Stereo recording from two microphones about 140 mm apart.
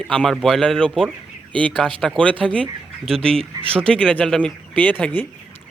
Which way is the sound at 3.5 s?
25° right (ahead or behind).